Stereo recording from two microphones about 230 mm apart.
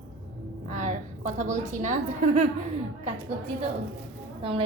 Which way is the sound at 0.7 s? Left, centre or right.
Right.